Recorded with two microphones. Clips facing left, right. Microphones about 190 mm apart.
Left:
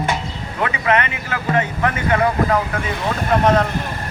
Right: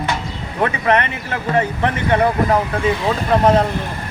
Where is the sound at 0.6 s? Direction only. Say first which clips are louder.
Right 2 dB; 35° right (ahead or behind).